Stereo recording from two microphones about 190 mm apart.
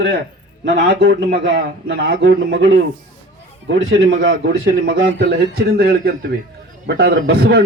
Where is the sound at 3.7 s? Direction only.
90° right.